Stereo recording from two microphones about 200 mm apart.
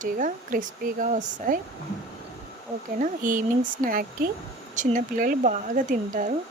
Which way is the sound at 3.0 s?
40° right (ahead or behind).